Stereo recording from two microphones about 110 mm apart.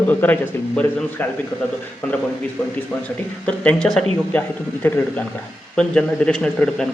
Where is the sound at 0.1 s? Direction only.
15° left (ahead or behind).